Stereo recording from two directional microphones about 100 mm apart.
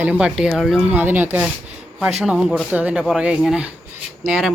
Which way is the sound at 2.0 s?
Centre (ahead or behind).